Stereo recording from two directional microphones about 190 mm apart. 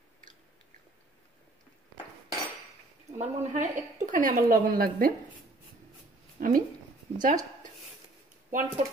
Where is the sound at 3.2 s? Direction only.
40° right (ahead or behind).